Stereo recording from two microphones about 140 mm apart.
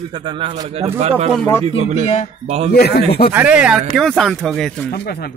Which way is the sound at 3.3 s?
10° right (ahead or behind).